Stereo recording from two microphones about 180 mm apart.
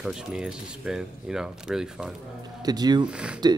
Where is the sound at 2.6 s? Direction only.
20° right (ahead or behind).